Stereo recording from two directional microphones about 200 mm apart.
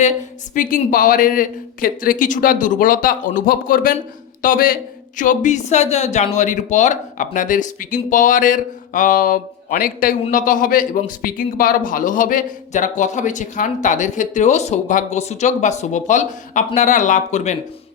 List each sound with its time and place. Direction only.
0.0 s speech: 40° left (ahead or behind)